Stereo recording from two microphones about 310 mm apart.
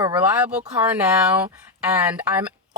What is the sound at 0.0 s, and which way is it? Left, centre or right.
Speech, centre.